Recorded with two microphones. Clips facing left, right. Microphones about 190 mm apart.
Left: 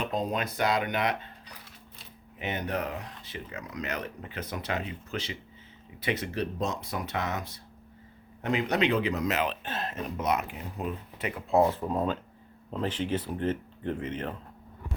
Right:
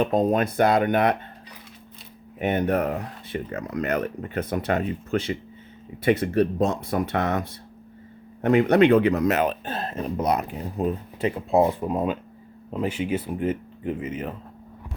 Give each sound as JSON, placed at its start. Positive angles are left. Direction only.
{"t": 0.0, "sound": "speech", "side_deg": -50}
{"t": 2.4, "sound": "a man's voice", "side_deg": -55}
{"t": 9.6, "sound": "speech", "side_deg": -35}
{"t": 11.5, "sound": "speech", "side_deg": -15}